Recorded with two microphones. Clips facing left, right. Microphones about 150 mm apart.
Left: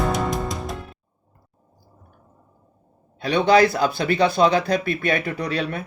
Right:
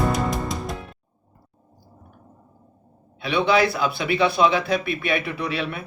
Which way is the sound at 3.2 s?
40° left (ahead or behind).